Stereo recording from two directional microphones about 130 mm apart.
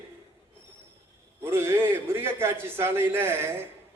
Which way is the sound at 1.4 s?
20° right (ahead or behind).